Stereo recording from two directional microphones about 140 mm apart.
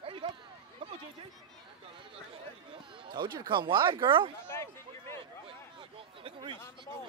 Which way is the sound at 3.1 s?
30° right (ahead or behind).